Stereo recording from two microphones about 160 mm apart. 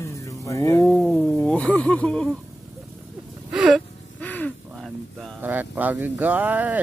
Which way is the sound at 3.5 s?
5° right (ahead or behind).